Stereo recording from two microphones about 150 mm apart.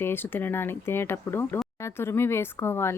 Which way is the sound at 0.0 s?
15° left (ahead or behind).